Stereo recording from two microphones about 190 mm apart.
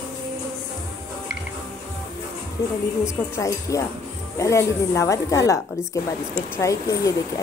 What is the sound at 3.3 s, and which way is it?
Speech, 15° left (ahead or behind).